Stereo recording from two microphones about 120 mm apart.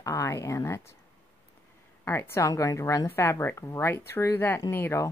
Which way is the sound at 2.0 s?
20° left (ahead or behind).